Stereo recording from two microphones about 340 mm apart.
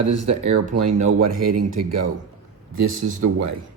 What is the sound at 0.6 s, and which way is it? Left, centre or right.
Speech, right.